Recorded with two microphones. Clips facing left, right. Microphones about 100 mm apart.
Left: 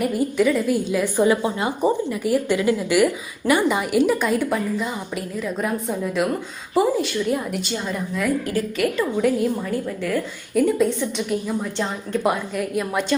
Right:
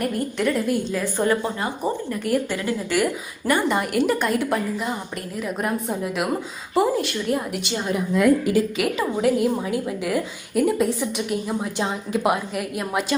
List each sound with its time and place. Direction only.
0.0 s a woman's voice: 5° left (ahead or behind)
0.9 s speech: 15° left (ahead or behind)
3.4 s a woman's voice: 5° left (ahead or behind); by 9.0 s 15° right (ahead or behind)
9.2 s a woman's voice: 5° right (ahead or behind)